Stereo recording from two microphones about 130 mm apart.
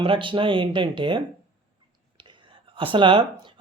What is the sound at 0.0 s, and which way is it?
Speech, 40° right (ahead or behind).